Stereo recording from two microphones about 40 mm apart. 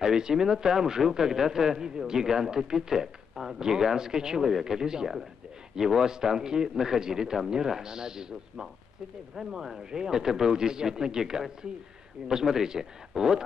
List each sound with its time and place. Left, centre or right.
0.0 s speech: centre